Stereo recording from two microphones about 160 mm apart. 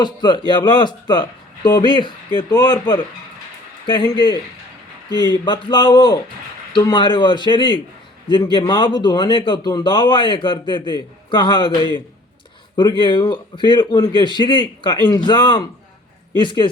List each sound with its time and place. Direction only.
0.0 s a man's voice: 30° left (ahead or behind)
5.2 s a man's voice: 30° left (ahead or behind)